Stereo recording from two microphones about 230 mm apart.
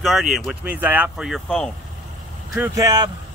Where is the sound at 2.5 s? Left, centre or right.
Centre.